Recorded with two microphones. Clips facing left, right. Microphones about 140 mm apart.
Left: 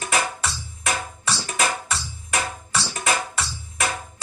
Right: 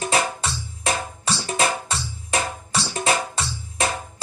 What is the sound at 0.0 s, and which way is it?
Music, 30° right (ahead or behind).